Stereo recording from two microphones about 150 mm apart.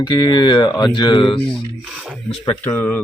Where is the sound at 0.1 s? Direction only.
30° left (ahead or behind).